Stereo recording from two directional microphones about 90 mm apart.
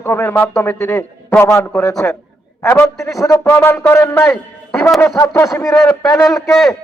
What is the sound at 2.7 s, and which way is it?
A man's voice, 30° left (ahead or behind).